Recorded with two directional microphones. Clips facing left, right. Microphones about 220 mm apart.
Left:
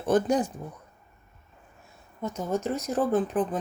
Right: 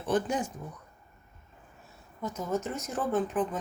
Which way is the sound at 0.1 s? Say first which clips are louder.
Left 5 dB; 40° left (ahead or behind).